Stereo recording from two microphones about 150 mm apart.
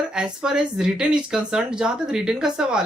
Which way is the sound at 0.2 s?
5° right (ahead or behind).